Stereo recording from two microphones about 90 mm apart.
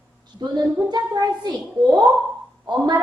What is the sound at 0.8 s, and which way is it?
A child's voice, 50° right (ahead or behind).